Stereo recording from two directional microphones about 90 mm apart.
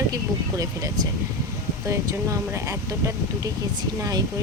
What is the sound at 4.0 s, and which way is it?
Speech, 45° right (ahead or behind).